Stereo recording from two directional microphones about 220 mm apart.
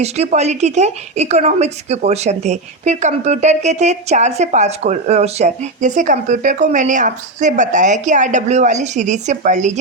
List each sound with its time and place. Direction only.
0.0 s a woman's voice: 30° right (ahead or behind)